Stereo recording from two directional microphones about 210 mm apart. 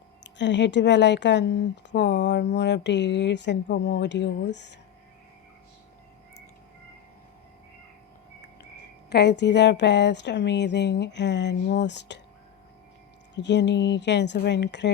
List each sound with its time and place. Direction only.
0.3 s speech: 55° left (ahead or behind)
9.0 s speech: 55° left (ahead or behind)
13.3 s speech: 55° left (ahead or behind)